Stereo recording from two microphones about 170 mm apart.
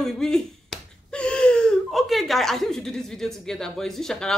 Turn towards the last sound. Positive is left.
turn(degrees=5)  # may be behind; listen again after turning